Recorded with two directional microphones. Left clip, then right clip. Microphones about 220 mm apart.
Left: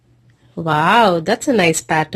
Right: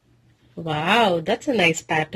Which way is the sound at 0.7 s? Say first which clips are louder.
Left 6 dB; 15° left (ahead or behind).